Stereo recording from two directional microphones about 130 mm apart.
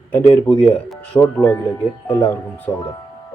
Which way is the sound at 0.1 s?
15° left (ahead or behind).